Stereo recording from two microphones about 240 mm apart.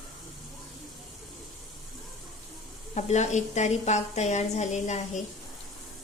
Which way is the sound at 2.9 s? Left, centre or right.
Left.